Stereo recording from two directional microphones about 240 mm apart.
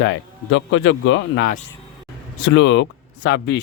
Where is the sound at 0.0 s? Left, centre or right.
Left.